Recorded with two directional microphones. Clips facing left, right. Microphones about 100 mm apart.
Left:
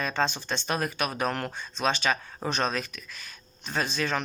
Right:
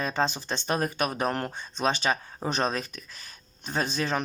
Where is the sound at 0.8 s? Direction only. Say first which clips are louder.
Right 1 dB; 35° right (ahead or behind).